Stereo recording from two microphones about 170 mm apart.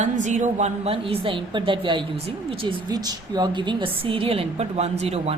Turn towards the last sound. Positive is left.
turn(degrees=-35)  # may be behind; listen again after turning